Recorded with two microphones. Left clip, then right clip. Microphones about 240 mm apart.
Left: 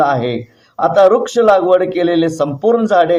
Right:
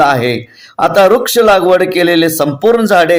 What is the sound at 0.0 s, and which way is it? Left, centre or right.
A man's voice, right.